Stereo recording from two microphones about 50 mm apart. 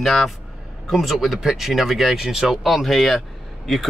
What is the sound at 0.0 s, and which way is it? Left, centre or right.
A man's voice, centre.